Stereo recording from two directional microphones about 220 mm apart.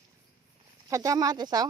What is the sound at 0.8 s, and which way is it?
Speech, 15° right (ahead or behind).